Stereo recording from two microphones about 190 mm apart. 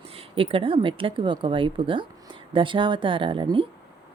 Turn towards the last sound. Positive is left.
turn(degrees=-25)  # may be behind; listen again after turning